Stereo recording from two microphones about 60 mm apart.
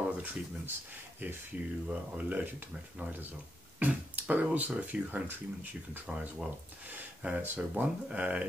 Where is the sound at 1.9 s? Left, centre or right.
Right.